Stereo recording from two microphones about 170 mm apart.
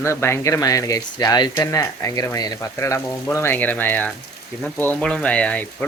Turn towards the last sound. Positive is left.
turn(degrees=10)  # may be behind; listen again after turning